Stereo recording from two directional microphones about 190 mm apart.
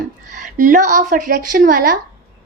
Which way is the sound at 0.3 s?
45° right (ahead or behind).